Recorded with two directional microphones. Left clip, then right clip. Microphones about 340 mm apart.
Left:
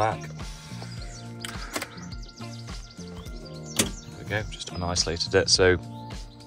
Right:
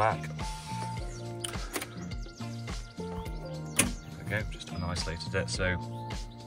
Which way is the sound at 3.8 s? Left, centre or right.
Centre.